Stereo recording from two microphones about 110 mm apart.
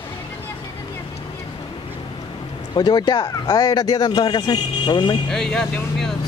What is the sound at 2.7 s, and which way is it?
A man's voice, 40° left (ahead or behind).